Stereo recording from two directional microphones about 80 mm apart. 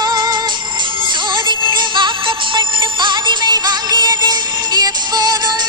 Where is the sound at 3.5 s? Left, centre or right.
Right.